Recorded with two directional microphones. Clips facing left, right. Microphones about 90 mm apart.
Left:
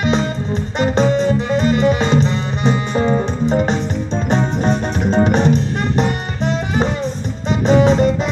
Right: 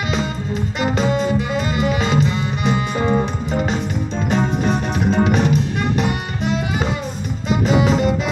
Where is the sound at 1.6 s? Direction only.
35° left (ahead or behind).